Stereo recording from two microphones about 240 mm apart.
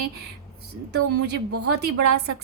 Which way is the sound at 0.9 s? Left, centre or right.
Right.